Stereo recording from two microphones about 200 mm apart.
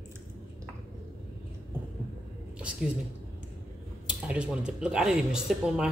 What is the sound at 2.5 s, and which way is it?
Speech, 5° right (ahead or behind).